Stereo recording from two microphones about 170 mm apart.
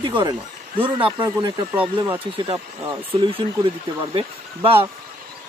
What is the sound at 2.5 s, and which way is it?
Speech, 25° right (ahead or behind).